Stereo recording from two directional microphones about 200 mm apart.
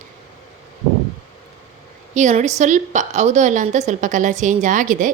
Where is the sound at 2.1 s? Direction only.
35° right (ahead or behind).